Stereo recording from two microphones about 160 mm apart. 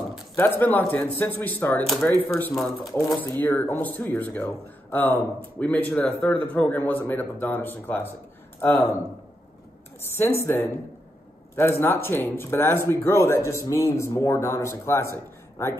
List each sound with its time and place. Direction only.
0.4 s a man's voice: 10° left (ahead or behind)
10.0 s a man's voice: 15° left (ahead or behind)